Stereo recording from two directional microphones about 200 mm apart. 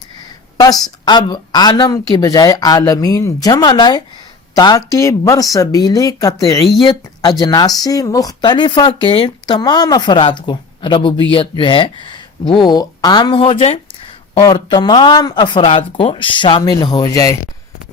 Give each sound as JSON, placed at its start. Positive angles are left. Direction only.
{"t": 0.5, "sound": "a woman's voice", "side_deg": 20}